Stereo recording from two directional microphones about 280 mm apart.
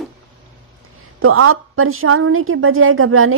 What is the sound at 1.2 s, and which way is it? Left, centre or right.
A woman's voice, right.